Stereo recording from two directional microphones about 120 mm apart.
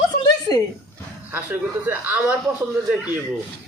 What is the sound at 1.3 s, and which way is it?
Speech, 15° right (ahead or behind).